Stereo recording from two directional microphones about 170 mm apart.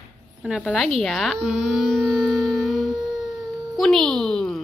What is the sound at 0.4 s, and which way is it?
Speech, 5° right (ahead or behind).